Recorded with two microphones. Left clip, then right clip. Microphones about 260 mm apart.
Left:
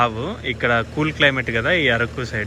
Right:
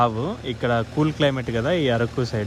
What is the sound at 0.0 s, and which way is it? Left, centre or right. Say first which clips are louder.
Speech: left 1 dB; centre.